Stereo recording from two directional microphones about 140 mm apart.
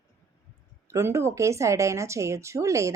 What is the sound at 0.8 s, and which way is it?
Speech, 20° right (ahead or behind).